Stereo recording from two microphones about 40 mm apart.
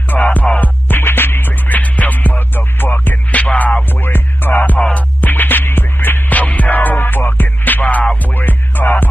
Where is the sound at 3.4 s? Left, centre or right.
Left.